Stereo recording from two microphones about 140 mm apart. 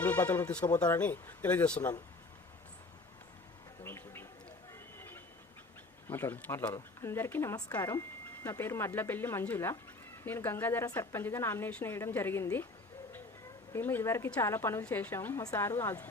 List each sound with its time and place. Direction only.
0.3 s a woman's voice: 10° left (ahead or behind)
3.8 s a sound: 15° left (ahead or behind)
6.1 s a woman's voice: 15° left (ahead or behind)
13.7 s a woman's voice: 15° left (ahead or behind)